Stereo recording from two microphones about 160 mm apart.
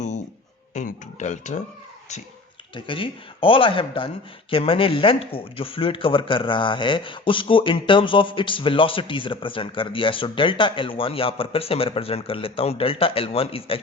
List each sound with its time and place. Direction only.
0.7 s speech: 50° left (ahead or behind)
2.7 s speech: 30° left (ahead or behind)